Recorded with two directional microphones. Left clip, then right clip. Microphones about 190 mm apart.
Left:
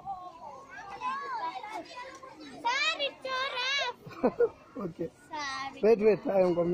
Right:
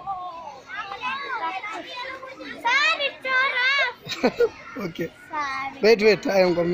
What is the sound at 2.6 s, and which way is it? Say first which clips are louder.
Children playing: right 9 dB; centre (ahead or behind).